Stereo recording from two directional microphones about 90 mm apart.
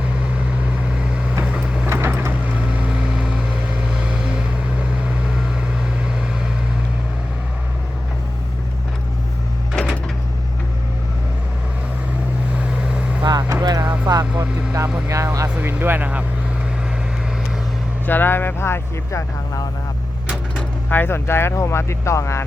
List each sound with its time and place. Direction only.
1.5 s vehicle: 10° right (ahead or behind)
1.9 s vehicle: 25° right (ahead or behind)
2.8 s vehicle: 15° right (ahead or behind)
12.5 s vehicle: 15° right (ahead or behind)
13.2 s vehicle: 45° right (ahead or behind)
15.5 s vehicle: 20° right (ahead or behind)
18.0 s vehicle: 20° left (ahead or behind)
20.6 s speech: 20° left (ahead or behind)